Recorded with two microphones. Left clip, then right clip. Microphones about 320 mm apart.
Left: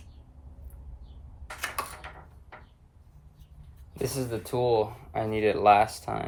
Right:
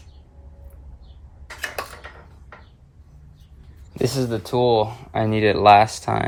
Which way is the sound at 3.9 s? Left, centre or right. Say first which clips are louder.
Right 8 dB; right.